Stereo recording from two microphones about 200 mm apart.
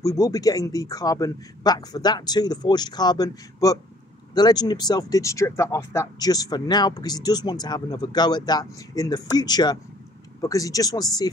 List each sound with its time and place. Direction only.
0.0 s speech: 15° left (ahead or behind)